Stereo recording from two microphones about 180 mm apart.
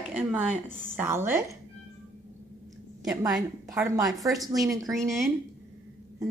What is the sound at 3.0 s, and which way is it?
Speech, 20° right (ahead or behind).